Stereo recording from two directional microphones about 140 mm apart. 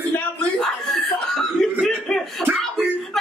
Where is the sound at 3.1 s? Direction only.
5° left (ahead or behind).